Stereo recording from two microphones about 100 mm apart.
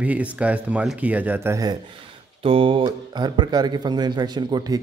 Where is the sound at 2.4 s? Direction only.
65° right (ahead or behind).